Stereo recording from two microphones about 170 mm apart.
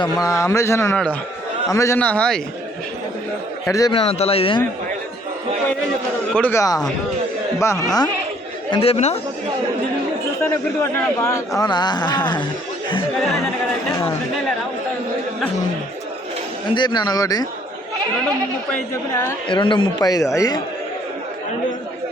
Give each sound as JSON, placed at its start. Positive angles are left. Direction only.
{"t": 0.0, "sound": "a man's voice", "side_deg": 20}
{"t": 3.7, "sound": "speech", "side_deg": 20}
{"t": 3.9, "sound": "speech", "side_deg": 35}
{"t": 6.3, "sound": "a man's voice", "side_deg": 10}
{"t": 8.7, "sound": "speech", "side_deg": 35}
{"t": 10.8, "sound": "speech", "side_deg": 20}
{"t": 16.7, "sound": "speech", "side_deg": 25}
{"t": 18.7, "sound": "a man's voice", "side_deg": 15}
{"t": 19.5, "sound": "speech", "side_deg": 30}